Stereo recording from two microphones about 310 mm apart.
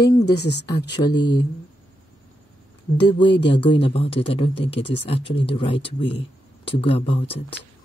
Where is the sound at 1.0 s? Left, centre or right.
Centre.